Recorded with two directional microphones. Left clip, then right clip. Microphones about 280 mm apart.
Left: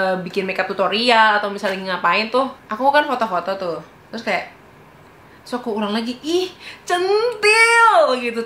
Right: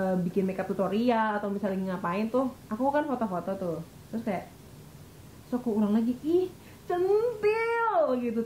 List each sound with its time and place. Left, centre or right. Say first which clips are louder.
0.0 s a child's voice: left 9 dB; centre
2.4 s a child's voice: left 11 dB; centre
4.2 s a child's voice: left 12 dB; centre
5.5 s a woman's voice: left 7 dB; centre
5.8 s a child's voice: left 6 dB; centre